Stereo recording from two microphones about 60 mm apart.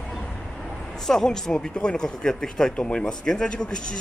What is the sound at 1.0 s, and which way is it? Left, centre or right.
Speech, centre.